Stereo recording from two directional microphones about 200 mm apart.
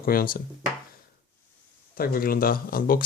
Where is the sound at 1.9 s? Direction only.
45° left (ahead or behind).